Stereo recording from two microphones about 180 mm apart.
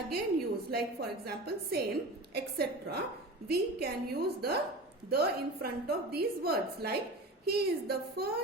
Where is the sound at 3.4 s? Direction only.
60° right (ahead or behind).